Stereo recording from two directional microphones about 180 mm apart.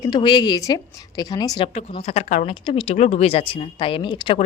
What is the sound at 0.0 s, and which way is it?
Speech, 25° left (ahead or behind).